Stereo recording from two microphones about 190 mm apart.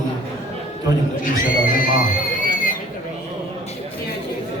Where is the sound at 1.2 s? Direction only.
45° left (ahead or behind).